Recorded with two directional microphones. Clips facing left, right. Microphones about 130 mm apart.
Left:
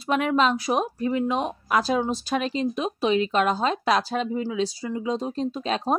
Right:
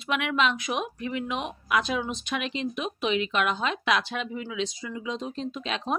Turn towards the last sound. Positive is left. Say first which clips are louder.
# left 6 dB
turn(degrees=35)  # may be behind; listen again after turning